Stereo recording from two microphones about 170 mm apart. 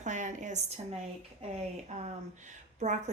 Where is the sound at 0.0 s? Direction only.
45° right (ahead or behind).